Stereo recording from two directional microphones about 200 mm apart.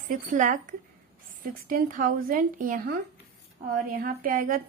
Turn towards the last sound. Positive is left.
turn(degrees=-45)  # may be behind; listen again after turning